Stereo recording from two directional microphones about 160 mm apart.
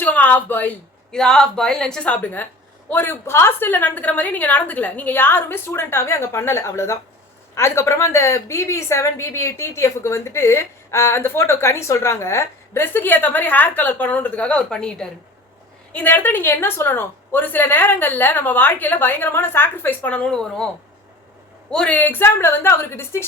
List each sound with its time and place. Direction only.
0.0 s a woman's voice: 10° left (ahead or behind)
21.7 s a woman's voice: 5° left (ahead or behind)